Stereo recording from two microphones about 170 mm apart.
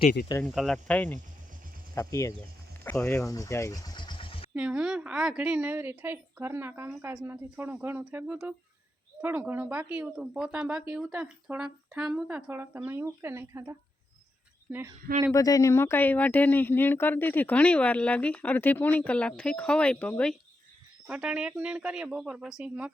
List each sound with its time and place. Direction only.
0.0 s speech: 60° left (ahead or behind)
0.4 s speech: centre (ahead or behind); by 4.4 s 30° left (ahead or behind)
4.5 s speech: 5° right (ahead or behind)
15.3 s speech: 20° left (ahead or behind)
21.1 s speech: 5° right (ahead or behind)